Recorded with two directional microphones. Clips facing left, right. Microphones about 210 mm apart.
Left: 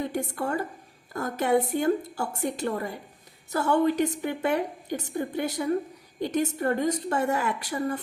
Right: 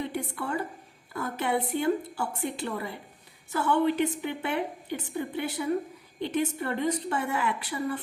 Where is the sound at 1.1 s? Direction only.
40° left (ahead or behind).